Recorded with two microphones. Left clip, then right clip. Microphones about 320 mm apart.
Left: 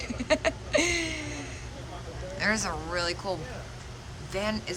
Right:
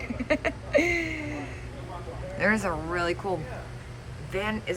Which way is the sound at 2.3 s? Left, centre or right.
Centre.